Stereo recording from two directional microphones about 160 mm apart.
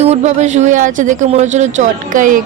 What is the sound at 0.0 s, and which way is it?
A woman's voice, 45° right (ahead or behind).